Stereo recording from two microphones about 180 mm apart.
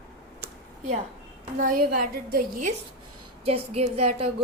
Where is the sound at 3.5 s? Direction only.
35° right (ahead or behind).